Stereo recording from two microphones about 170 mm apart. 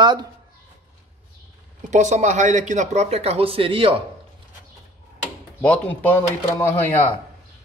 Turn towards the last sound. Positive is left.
turn(degrees=10)  # may be behind; listen again after turning